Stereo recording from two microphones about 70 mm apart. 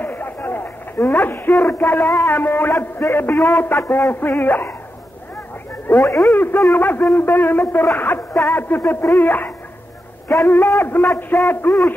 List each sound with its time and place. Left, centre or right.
0.0 s a man's voice: left
3.7 s a man's voice: left
5.9 s speech: left
6.3 s a man's voice: left
6.7 s music: left
8.5 s music: left
11.3 s a man's voice: left